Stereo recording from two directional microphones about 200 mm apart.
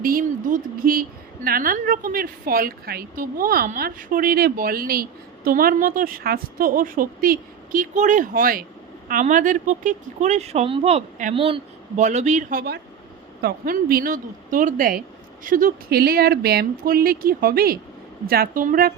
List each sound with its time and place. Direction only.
0.0 s a woman's voice: 45° right (ahead or behind)